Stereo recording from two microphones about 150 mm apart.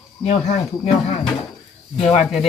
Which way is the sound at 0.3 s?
45° left (ahead or behind).